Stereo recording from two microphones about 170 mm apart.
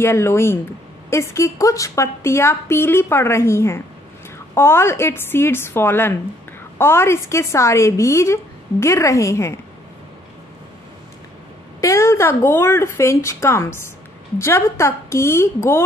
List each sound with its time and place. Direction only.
0.0 s a woman's voice: 15° left (ahead or behind)
11.8 s a woman's voice: 15° left (ahead or behind)